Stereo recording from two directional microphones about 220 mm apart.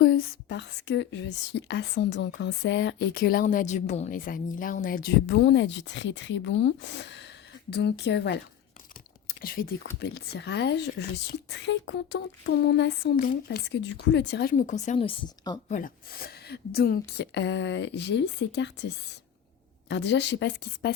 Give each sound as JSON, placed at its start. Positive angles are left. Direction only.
{"t": 0.0, "sound": "speech", "side_deg": 45}
{"t": 5.2, "sound": "speech", "side_deg": 55}
{"t": 9.2, "sound": "a sound", "side_deg": 40}
{"t": 10.0, "sound": "speech", "side_deg": 45}
{"t": 14.5, "sound": "speech", "side_deg": 35}
{"t": 15.7, "sound": "speech", "side_deg": 40}
{"t": 19.9, "sound": "speech", "side_deg": 50}